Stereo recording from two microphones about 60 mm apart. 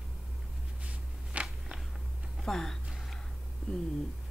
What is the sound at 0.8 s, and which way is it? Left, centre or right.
Walk, right.